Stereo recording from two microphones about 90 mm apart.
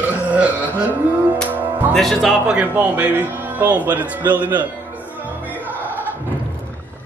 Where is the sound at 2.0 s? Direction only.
5° left (ahead or behind).